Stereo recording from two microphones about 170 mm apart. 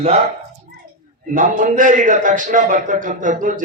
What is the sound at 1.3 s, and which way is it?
A man's voice, 50° right (ahead or behind).